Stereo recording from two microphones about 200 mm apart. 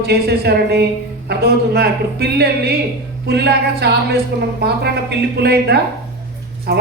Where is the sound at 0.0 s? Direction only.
55° right (ahead or behind).